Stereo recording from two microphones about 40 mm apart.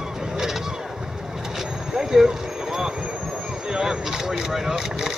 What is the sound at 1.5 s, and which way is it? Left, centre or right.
Vehicle, centre.